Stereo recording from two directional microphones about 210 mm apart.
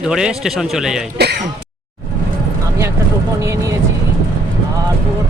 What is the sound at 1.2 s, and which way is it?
Speech, 50° right (ahead or behind).